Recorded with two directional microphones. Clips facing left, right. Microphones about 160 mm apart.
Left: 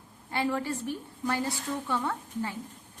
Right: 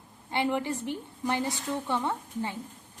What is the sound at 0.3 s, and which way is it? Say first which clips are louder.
A woman's voice: right 1 dB; 20° right (ahead or behind).